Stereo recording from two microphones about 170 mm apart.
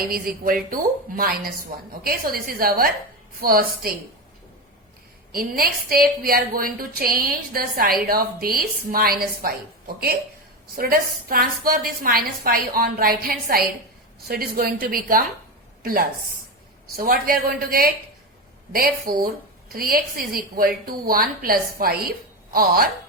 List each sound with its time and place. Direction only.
0.4 s a woman's voice: 55° right (ahead or behind)
5.3 s a woman's voice: 60° right (ahead or behind)